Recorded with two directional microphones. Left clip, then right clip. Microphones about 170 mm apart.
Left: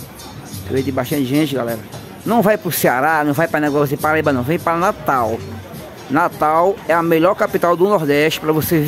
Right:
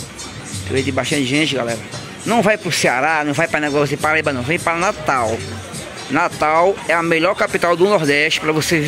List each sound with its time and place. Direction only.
0.7 s a man's voice: 25° left (ahead or behind)
5.0 s speech: 15° left (ahead or behind)
6.1 s a man's voice: 25° left (ahead or behind)